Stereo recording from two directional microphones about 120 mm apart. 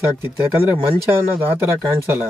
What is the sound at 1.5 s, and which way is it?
Speech, 20° right (ahead or behind).